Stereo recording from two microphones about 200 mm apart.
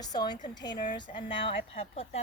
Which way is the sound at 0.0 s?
20° left (ahead or behind).